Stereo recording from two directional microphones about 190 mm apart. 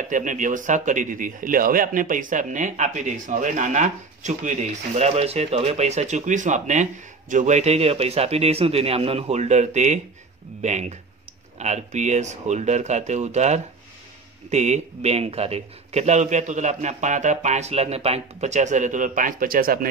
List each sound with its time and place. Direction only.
0.1 s speech: 40° right (ahead or behind)